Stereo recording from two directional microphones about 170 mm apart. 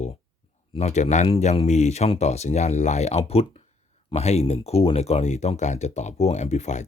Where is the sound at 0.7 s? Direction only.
40° left (ahead or behind).